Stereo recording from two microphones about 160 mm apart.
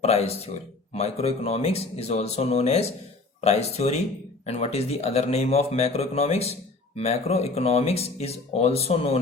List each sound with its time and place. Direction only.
0.0 s speech: 40° left (ahead or behind)